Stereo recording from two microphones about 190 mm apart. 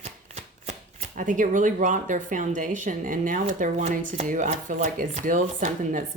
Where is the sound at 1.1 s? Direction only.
45° right (ahead or behind).